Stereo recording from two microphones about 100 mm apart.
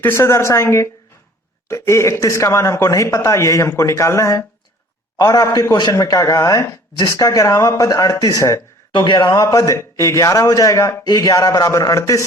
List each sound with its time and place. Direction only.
0.0 s speech: 25° left (ahead or behind)
8.9 s a man's voice: 50° left (ahead or behind)
9.3 s speech: 35° left (ahead or behind)